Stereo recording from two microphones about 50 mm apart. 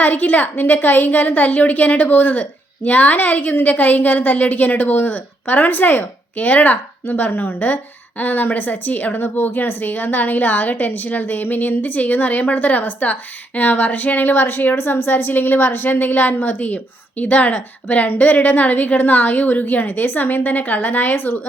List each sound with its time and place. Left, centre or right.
0.0 s speech: left